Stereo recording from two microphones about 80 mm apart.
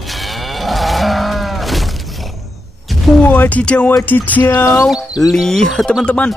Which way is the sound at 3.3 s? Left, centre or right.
Left.